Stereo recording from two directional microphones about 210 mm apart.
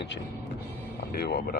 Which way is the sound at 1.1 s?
45° left (ahead or behind).